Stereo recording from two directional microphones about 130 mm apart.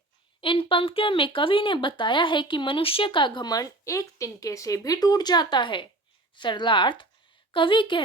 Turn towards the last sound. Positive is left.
turn(degrees=40)  # may be behind; listen again after turning